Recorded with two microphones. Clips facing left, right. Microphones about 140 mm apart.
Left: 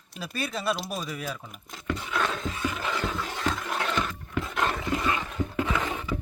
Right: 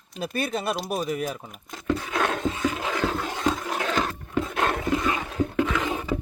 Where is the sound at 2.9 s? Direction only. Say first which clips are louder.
Right 5 dB; 90° right.